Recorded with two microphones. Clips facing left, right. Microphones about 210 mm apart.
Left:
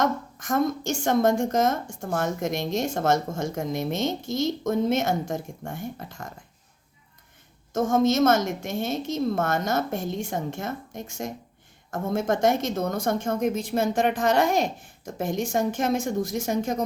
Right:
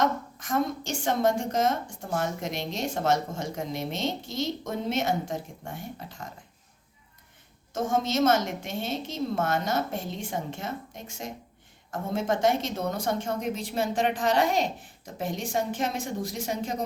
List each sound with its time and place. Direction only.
0.3 s a woman's voice: 45° left (ahead or behind)
7.7 s a woman's voice: 45° left (ahead or behind)